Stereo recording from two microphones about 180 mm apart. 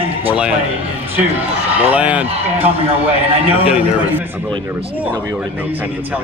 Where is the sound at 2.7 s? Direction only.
35° right (ahead or behind).